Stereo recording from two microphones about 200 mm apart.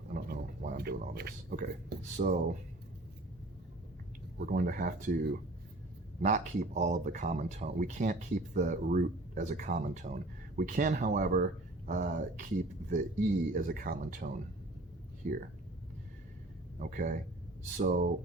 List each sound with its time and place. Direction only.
0.1 s speech: 45° right (ahead or behind)
4.4 s speech: 45° right (ahead or behind)
16.8 s speech: 40° right (ahead or behind)